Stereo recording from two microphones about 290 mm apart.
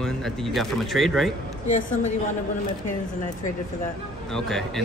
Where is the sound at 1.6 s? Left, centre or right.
Left.